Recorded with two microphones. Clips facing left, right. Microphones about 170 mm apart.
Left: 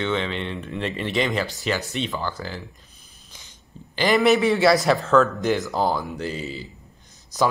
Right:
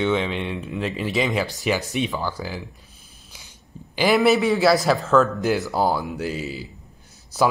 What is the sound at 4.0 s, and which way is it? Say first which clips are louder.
A man's voice: right 1 dB; 5° right (ahead or behind).